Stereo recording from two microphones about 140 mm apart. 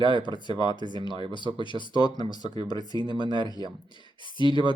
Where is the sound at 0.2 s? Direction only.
35° left (ahead or behind).